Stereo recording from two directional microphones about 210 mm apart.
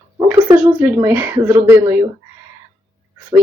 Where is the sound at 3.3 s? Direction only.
15° right (ahead or behind).